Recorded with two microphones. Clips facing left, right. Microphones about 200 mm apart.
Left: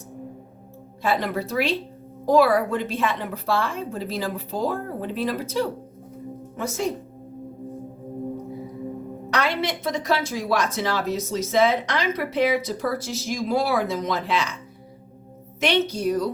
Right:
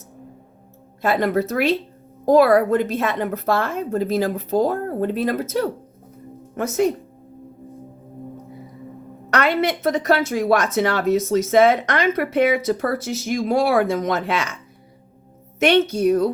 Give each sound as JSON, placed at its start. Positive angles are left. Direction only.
{"t": 1.0, "sound": "a woman's voice", "side_deg": -50}
{"t": 9.3, "sound": "a woman's voice", "side_deg": -55}
{"t": 15.6, "sound": "a woman's voice", "side_deg": -50}